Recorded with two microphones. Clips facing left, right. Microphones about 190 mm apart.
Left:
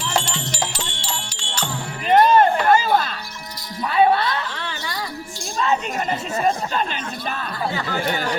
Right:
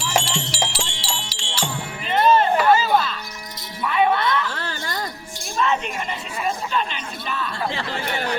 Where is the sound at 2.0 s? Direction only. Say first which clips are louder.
Left 3 dB; 50° left (ahead or behind).